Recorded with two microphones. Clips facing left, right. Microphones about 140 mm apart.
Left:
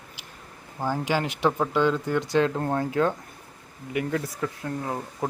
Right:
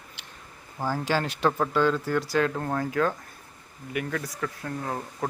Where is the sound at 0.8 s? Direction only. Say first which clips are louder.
Left 1 dB; 15° left (ahead or behind).